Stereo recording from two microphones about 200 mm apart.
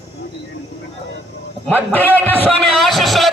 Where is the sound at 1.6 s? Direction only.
10° left (ahead or behind).